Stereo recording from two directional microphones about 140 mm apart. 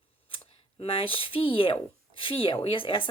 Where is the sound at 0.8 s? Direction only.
40° left (ahead or behind).